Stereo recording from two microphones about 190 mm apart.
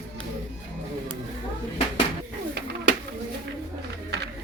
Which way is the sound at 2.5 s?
60° right (ahead or behind).